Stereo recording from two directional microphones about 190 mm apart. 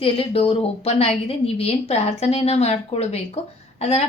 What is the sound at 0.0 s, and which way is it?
A woman's voice, 30° left (ahead or behind).